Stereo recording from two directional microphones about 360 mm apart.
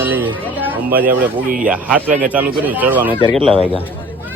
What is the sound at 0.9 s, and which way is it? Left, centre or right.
Speech, right.